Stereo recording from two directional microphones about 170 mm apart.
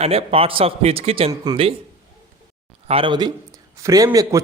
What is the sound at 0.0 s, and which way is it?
A man's voice, 35° right (ahead or behind).